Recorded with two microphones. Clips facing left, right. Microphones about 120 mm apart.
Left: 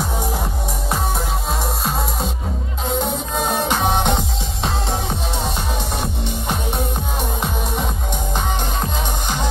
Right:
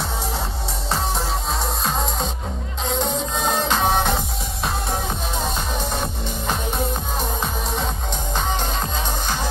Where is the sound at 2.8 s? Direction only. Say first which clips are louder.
Left 1 dB; 10° left (ahead or behind).